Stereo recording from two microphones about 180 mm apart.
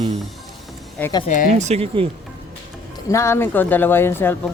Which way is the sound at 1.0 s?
10° left (ahead or behind).